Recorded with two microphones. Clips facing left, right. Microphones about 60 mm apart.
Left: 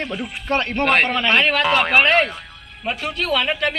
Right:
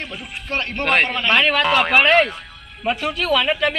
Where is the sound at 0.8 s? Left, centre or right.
Left.